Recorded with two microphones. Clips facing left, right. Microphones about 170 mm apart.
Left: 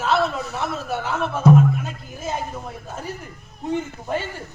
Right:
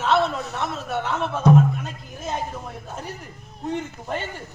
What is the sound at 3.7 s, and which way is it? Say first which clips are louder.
Speech: left 3 dB; 5° left (ahead or behind).